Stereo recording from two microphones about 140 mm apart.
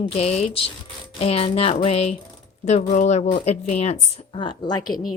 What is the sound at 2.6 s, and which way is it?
A woman's voice, 60° left (ahead or behind).